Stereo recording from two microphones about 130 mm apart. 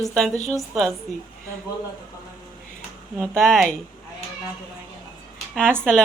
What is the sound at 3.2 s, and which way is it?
Speech, 5° left (ahead or behind).